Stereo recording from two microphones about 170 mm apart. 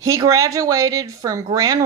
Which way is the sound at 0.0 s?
20° right (ahead or behind).